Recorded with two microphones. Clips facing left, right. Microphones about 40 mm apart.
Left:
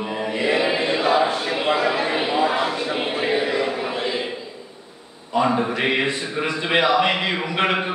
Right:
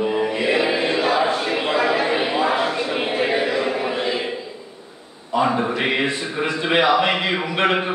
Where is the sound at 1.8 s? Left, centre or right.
Centre.